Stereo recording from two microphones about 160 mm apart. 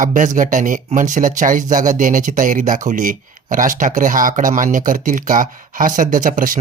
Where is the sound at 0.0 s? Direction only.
50° right (ahead or behind).